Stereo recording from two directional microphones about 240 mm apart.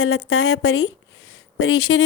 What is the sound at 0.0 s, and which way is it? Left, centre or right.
Speech, left.